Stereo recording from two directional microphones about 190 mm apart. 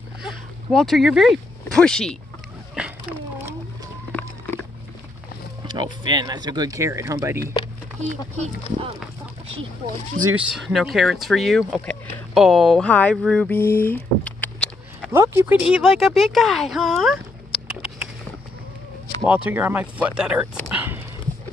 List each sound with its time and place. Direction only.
0.2 s speech: centre (ahead or behind)
2.7 s a sound: 5° right (ahead or behind)
4.1 s a sound: 10° left (ahead or behind)
5.7 s speech: 20° right (ahead or behind)
7.5 s speech: 20° left (ahead or behind)
10.3 s speech: centre (ahead or behind)
13.8 s patter: 10° left (ahead or behind)
15.0 s speech: 15° right (ahead or behind)
19.2 s speech: 5° right (ahead or behind)
20.7 s dog: 10° right (ahead or behind)